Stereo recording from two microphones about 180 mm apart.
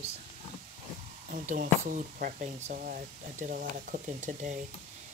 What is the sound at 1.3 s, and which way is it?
Speech, 50° right (ahead or behind).